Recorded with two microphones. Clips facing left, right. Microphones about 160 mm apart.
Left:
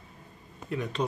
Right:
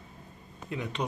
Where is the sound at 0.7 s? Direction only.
20° right (ahead or behind).